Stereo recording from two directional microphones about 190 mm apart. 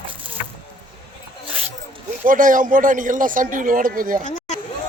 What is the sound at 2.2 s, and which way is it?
A man's voice, 45° right (ahead or behind).